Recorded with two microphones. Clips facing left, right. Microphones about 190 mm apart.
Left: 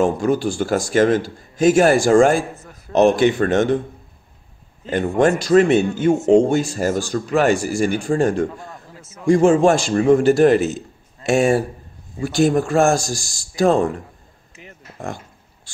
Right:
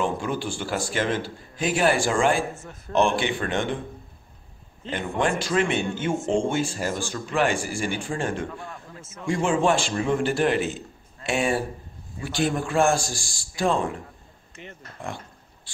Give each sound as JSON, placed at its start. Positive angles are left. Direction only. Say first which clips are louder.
{"t": 0.0, "sound": "a man's voice", "louder": "left 9 dB", "side_deg": 40}
{"t": 4.8, "sound": "a man's voice", "louder": "left 9 dB", "side_deg": 45}
{"t": 14.5, "sound": "a sound", "louder": "right 1 dB", "side_deg": 5}